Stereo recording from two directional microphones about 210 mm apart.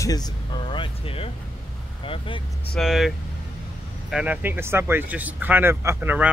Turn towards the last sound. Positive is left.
turn(degrees=-5)  # may be behind; listen again after turning